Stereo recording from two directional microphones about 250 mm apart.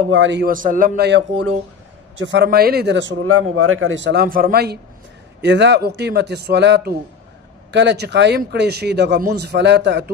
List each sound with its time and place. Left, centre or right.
0.1 s speech: right
3.3 s speech: right